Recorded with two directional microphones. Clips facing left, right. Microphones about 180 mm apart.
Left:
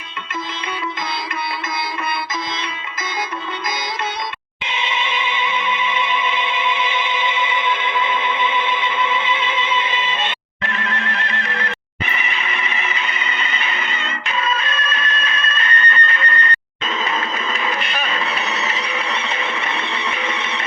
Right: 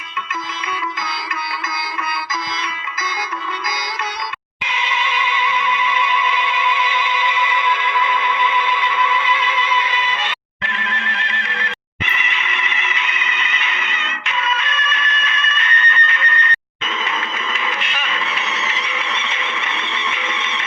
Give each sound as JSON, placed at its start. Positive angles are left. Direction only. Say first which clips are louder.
{"t": 4.6, "sound": "neigh", "louder": "even", "side_deg": 25}
{"t": 10.6, "sound": "neigh", "louder": "left 3 dB", "side_deg": 45}
{"t": 17.0, "sound": "a sound", "louder": "left 3 dB", "side_deg": 35}